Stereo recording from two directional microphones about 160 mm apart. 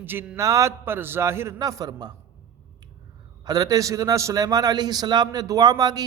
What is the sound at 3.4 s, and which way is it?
A man's voice, 25° right (ahead or behind).